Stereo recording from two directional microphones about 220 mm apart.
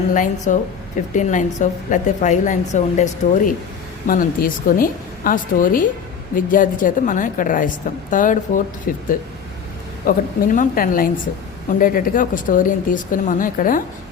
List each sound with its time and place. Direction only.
0.1 s a woman's voice: 35° left (ahead or behind)
10.1 s a woman's voice: 40° left (ahead or behind)